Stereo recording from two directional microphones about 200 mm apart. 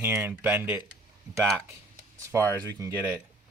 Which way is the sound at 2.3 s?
15° right (ahead or behind).